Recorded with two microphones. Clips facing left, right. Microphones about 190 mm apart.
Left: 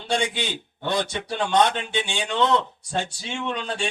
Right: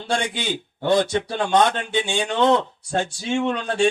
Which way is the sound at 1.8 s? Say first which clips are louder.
Right 4 dB; 50° right (ahead or behind).